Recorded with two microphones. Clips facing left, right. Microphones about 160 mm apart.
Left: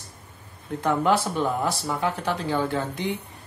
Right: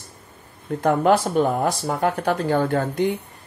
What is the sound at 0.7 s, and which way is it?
Speech, 45° right (ahead or behind).